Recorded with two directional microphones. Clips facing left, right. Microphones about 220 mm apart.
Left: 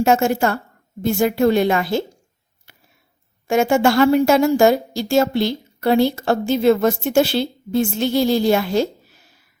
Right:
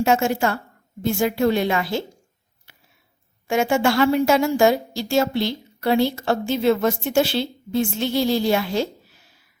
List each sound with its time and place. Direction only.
0.0 s a woman's voice: 45° left (ahead or behind)
3.4 s a woman's voice: 45° left (ahead or behind)